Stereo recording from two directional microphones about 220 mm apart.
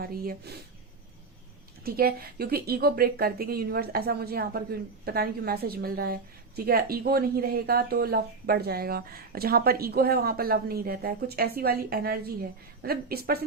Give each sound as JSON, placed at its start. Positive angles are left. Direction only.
{"t": 0.0, "sound": "speech", "side_deg": -45}
{"t": 1.8, "sound": "speech", "side_deg": -45}